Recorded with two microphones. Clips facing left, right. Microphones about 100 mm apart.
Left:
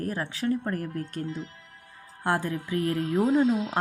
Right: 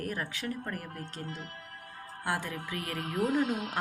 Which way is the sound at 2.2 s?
40° left (ahead or behind).